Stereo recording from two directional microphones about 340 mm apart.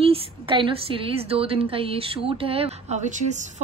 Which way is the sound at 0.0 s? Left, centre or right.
Centre.